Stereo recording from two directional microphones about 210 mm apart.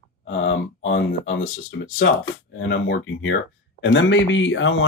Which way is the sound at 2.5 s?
60° left (ahead or behind).